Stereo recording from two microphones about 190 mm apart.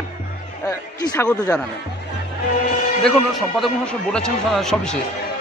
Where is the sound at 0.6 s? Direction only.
15° left (ahead or behind).